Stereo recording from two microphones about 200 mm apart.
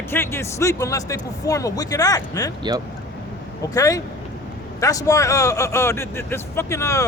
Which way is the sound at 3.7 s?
15° left (ahead or behind).